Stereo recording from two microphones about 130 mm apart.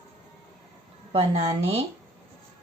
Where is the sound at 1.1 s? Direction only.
45° right (ahead or behind).